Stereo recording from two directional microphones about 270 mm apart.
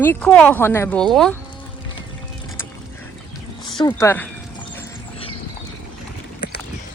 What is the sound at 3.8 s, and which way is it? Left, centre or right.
Speech, centre.